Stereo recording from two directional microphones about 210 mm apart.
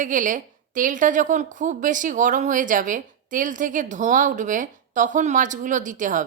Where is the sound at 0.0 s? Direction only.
40° right (ahead or behind).